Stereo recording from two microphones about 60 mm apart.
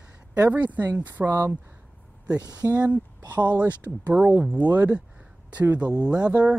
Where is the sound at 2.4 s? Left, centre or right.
Right.